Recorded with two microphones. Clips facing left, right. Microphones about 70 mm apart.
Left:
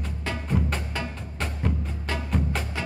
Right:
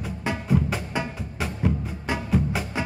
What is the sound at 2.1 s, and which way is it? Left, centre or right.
Music, centre.